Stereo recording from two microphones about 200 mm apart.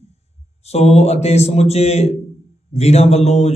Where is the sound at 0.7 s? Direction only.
30° left (ahead or behind).